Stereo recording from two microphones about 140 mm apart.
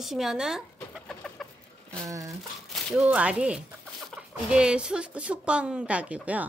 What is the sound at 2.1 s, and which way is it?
Speech, 25° right (ahead or behind).